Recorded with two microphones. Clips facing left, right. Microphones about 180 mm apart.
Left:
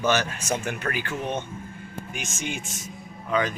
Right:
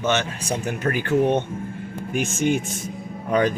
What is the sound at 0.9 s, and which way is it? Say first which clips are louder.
Speech: right 12 dB; 55° right (ahead or behind).